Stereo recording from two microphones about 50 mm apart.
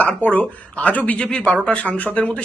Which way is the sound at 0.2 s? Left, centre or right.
Left.